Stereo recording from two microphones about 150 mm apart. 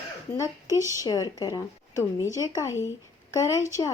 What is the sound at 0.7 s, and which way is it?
Speech, 20° right (ahead or behind).